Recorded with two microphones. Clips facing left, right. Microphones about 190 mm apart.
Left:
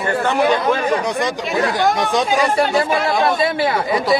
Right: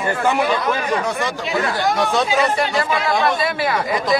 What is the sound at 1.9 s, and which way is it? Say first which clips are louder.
Speech: left 1 dB; 15° left (ahead or behind).